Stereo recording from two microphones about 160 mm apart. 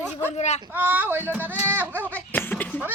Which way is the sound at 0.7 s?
10° right (ahead or behind).